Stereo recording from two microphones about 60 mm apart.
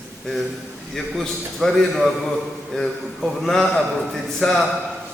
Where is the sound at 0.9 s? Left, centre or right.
Centre.